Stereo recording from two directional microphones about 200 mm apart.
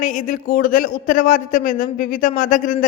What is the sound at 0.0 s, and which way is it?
A man's voice, 40° left (ahead or behind).